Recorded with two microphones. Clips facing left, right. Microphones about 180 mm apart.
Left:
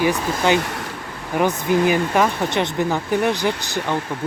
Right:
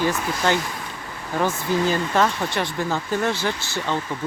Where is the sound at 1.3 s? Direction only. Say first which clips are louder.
Left 4 dB; 20° left (ahead or behind).